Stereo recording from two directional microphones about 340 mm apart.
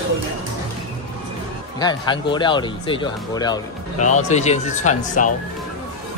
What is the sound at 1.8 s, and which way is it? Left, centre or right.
Speech, centre.